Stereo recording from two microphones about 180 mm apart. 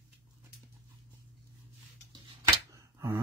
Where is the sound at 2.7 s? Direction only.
15° right (ahead or behind).